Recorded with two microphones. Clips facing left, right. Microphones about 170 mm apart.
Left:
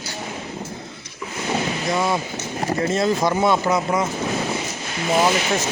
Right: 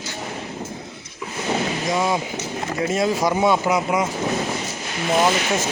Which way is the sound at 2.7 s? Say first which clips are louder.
Even; 10° right (ahead or behind).